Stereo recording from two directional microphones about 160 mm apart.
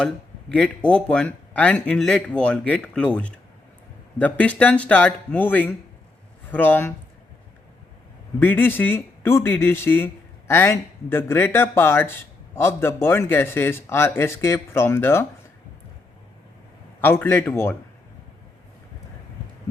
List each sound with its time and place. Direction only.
0.5 s speech: 5° left (ahead or behind)
8.4 s speech: 10° left (ahead or behind)
17.0 s speech: 10° left (ahead or behind)